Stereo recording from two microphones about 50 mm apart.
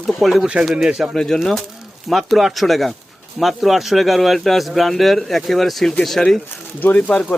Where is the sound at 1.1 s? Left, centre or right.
Centre.